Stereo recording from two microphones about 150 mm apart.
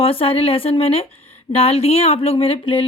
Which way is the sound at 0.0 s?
40° left (ahead or behind).